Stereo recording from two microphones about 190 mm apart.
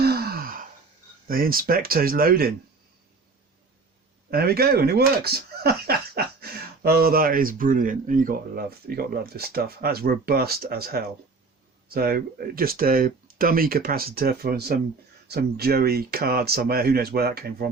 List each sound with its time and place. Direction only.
0.0 s sigh: 55° right (ahead or behind)
1.3 s speech: 50° right (ahead or behind)
4.3 s speech: 55° right (ahead or behind)